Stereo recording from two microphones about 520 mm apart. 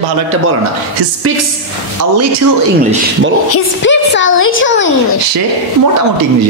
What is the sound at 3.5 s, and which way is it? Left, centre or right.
A child's voice, left.